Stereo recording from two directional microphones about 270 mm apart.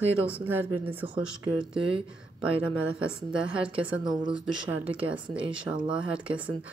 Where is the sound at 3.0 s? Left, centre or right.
Centre.